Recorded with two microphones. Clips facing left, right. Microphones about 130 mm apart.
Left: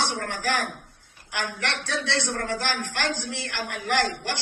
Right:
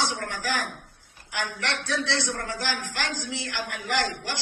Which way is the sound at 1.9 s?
60° left (ahead or behind).